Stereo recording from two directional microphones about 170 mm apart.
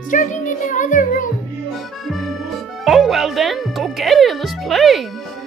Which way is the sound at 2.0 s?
Centre (ahead or behind).